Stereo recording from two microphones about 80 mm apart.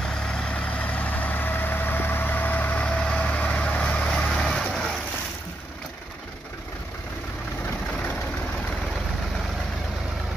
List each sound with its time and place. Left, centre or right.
0.1 s vehicle: centre